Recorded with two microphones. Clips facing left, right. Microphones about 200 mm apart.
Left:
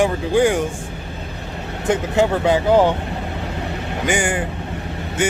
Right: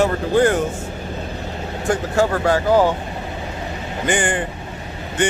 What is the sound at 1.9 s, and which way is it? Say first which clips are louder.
Speech: left 1 dB; 20° left (ahead or behind).